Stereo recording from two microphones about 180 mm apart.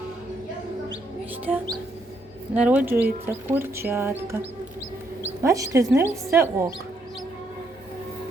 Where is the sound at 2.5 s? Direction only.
10° right (ahead or behind).